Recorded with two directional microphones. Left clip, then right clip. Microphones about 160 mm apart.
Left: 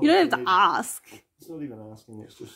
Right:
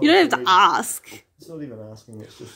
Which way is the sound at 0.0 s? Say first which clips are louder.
Right 4 dB; 5° left (ahead or behind).